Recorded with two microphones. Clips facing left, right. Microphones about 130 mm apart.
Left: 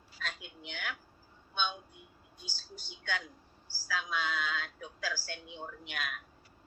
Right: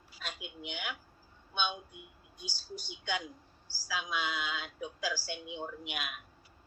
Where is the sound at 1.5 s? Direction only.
15° right (ahead or behind).